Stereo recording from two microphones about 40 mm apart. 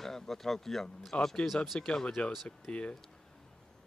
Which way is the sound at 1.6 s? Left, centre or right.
Left.